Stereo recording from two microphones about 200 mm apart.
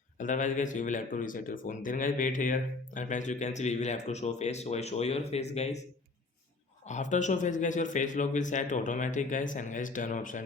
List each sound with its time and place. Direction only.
0.2 s speech: 40° left (ahead or behind)
6.8 s speech: 35° left (ahead or behind)